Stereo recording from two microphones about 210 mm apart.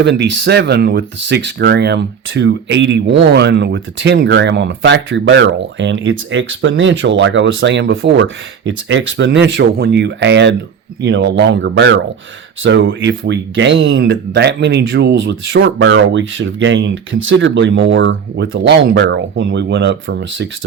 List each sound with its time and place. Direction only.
0.0 s speech: 55° right (ahead or behind)